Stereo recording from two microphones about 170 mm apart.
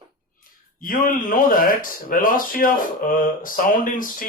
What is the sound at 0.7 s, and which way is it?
Speech, 55° left (ahead or behind).